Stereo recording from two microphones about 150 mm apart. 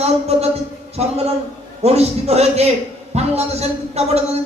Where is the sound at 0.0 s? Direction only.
45° right (ahead or behind).